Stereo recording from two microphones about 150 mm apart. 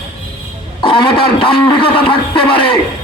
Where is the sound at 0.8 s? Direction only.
35° left (ahead or behind).